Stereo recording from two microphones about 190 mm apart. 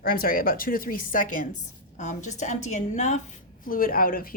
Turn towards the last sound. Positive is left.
turn(degrees=50)  # may be behind; listen again after turning